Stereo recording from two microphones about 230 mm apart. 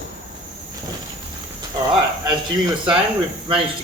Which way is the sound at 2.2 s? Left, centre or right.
Centre.